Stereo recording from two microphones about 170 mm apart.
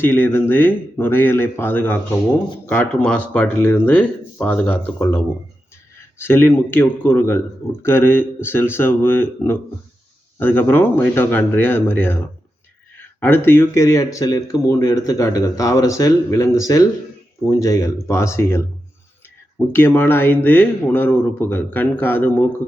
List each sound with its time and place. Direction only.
0.0 s speech: 15° left (ahead or behind)